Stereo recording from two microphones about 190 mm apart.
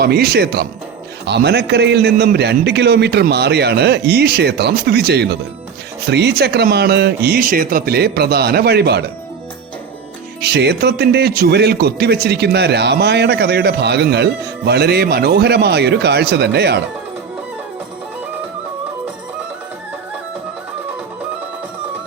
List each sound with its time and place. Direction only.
0.0 s a man's voice: 55° right (ahead or behind)
10.4 s a man's voice: 60° right (ahead or behind)